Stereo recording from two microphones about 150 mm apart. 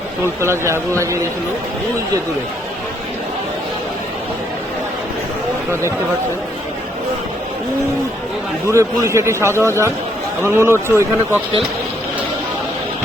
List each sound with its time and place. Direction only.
0.4 s a man's voice: 20° right (ahead or behind)
8.6 s a man's voice: 20° right (ahead or behind)